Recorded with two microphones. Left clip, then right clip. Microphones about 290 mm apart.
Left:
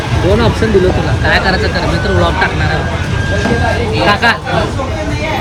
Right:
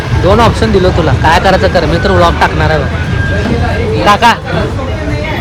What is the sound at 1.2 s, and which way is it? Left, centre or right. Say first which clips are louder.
Speech: right 4 dB; centre.